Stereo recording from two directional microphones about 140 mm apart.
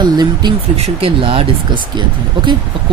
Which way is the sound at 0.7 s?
45° right (ahead or behind).